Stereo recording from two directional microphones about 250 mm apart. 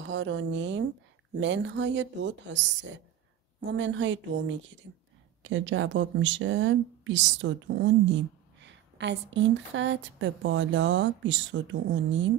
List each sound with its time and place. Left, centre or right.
0.0 s speech: right
3.6 s speech: right
5.4 s speech: right